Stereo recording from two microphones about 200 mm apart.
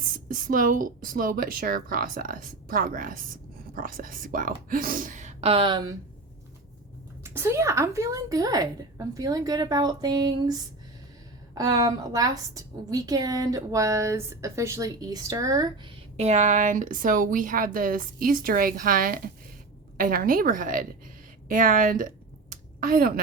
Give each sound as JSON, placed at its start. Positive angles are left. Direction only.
{"t": 0.3, "sound": "speech", "side_deg": -45}
{"t": 7.3, "sound": "a woman's voice", "side_deg": -15}
{"t": 16.1, "sound": "speech", "side_deg": -35}